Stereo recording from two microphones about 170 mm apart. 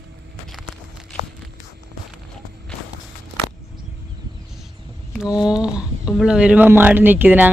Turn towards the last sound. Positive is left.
turn(degrees=-10)  # may be behind; listen again after turning